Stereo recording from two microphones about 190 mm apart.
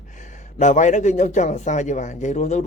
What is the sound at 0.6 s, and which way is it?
Speech, 40° left (ahead or behind).